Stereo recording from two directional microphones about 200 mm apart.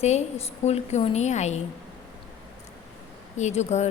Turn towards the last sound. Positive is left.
turn(degrees=35)  # may be behind; listen again after turning